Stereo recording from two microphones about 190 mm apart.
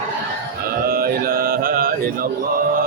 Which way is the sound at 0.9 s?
50° right (ahead or behind).